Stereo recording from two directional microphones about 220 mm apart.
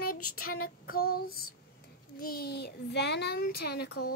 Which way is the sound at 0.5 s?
40° left (ahead or behind).